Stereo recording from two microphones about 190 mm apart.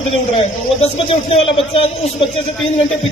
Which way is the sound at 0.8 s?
30° left (ahead or behind).